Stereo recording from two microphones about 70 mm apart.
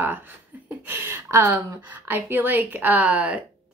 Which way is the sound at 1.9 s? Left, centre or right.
Right.